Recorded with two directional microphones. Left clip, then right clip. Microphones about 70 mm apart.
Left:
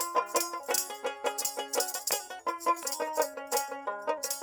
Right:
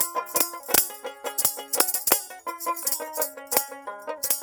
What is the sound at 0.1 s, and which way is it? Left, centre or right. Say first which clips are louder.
Music: right 1 dB; left.